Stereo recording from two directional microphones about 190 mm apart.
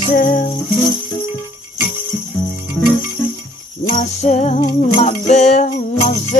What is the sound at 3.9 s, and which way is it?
Music, 35° left (ahead or behind).